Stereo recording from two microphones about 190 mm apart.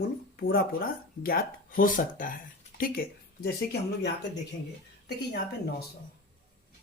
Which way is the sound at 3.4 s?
60° left (ahead or behind).